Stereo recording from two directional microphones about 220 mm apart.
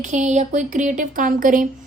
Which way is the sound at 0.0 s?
35° right (ahead or behind).